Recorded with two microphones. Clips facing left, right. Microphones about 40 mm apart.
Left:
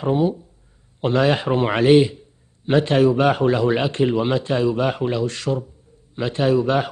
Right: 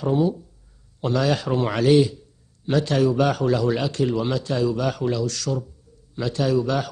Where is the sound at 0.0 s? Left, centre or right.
Left.